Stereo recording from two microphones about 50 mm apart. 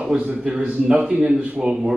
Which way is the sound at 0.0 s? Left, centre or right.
Right.